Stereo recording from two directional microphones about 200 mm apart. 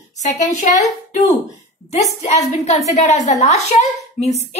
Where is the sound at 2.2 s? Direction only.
35° left (ahead or behind).